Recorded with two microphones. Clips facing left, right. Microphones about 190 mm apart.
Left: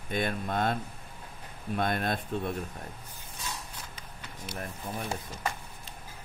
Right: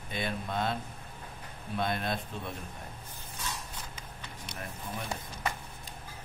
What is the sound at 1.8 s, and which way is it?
Speech, 50° left (ahead or behind).